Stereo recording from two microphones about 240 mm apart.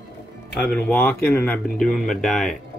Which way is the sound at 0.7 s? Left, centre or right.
Centre.